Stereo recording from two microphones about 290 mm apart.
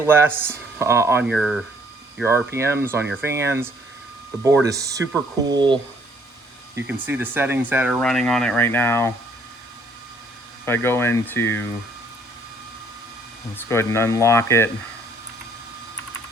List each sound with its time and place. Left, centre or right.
0.0 s speech: centre
4.7 s speech: centre
10.7 s speech: centre
13.6 s speech: centre